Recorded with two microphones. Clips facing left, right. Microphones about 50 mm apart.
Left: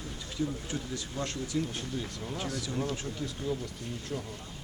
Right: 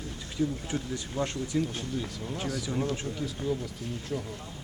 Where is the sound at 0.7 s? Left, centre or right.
Right.